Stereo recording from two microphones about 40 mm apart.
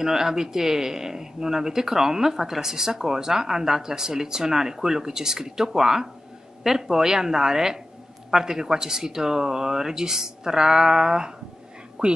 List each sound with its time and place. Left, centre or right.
0.0 s speech: centre